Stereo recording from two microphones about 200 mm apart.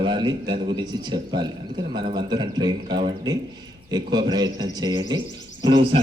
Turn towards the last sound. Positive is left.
turn(degrees=-20)  # may be behind; listen again after turning